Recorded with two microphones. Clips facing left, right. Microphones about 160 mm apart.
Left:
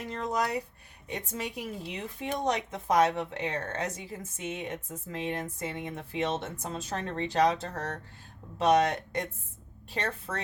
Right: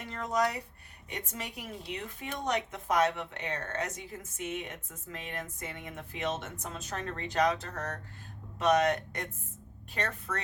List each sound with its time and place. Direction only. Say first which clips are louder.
0.1 s speech: even; 30° left (ahead or behind)